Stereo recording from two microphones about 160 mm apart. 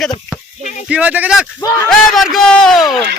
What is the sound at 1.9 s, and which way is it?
Speech, centre (ahead or behind).